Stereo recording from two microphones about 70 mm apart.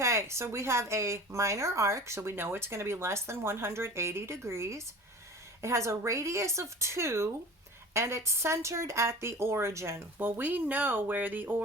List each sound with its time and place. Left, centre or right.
0.0 s speech: right
10.2 s speech: right